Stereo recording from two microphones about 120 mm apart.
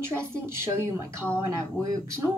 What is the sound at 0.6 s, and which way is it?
Speech, 25° right (ahead or behind).